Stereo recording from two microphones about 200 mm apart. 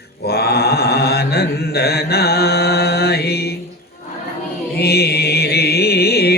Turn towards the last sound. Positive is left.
turn(degrees=50)  # may be behind; listen again after turning